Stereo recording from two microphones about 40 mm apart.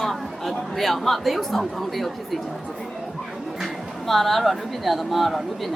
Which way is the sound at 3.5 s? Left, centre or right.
Centre.